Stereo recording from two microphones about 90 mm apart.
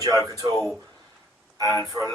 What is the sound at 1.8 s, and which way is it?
Speech, 40° right (ahead or behind).